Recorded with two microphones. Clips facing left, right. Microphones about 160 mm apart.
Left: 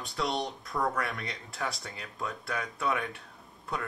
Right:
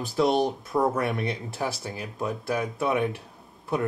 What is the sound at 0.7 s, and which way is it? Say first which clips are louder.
Speech: right 7 dB; 25° right (ahead or behind).